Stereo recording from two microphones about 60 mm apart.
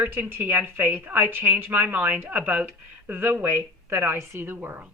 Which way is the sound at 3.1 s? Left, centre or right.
Right.